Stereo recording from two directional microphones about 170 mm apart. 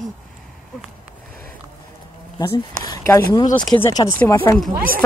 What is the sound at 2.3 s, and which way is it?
Speech, 25° left (ahead or behind).